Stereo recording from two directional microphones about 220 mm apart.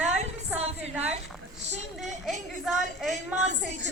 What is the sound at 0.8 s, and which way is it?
Speech, 5° right (ahead or behind).